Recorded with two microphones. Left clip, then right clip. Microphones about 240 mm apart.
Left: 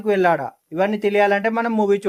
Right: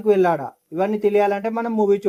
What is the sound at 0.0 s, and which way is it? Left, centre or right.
A man's voice, left.